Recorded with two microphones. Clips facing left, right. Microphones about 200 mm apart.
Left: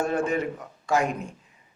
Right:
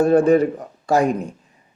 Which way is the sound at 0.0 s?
35° right (ahead or behind).